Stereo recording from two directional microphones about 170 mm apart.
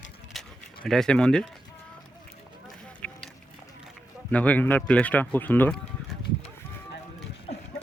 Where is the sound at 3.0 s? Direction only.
10° left (ahead or behind).